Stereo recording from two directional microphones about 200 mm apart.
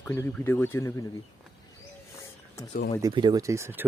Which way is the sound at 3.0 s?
20° right (ahead or behind).